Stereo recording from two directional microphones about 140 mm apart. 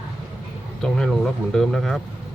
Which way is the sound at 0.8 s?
5° left (ahead or behind).